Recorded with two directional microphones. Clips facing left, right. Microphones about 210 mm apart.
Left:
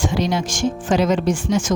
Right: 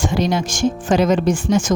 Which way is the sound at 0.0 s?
50° right (ahead or behind).